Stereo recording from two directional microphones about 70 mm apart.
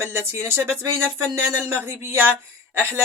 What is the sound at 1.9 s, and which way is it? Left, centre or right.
Speech, right.